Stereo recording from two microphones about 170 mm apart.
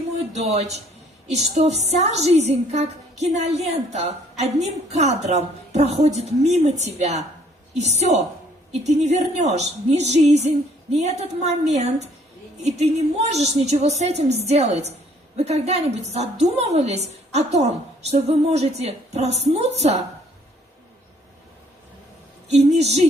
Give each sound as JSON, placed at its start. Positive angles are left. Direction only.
{"t": 0.3, "sound": "a woman's voice", "side_deg": -40}
{"t": 22.4, "sound": "a woman's voice", "side_deg": -40}